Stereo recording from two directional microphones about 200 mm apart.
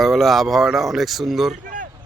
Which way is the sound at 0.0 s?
Centre (ahead or behind).